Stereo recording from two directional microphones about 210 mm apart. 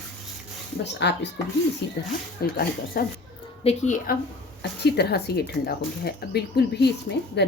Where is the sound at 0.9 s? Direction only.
55° left (ahead or behind).